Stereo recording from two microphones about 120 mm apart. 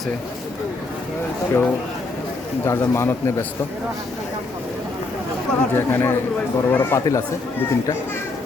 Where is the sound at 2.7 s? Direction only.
25° left (ahead or behind).